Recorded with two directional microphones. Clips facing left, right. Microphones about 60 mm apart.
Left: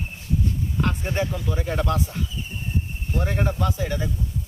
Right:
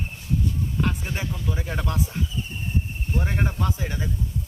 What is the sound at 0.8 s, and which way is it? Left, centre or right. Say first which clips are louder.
Speech: left 5 dB; centre.